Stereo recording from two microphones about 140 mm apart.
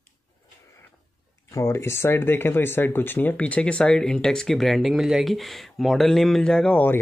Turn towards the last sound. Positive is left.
turn(degrees=10)  # may be behind; listen again after turning